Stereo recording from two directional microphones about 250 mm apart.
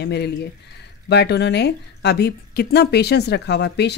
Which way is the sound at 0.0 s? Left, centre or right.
Left.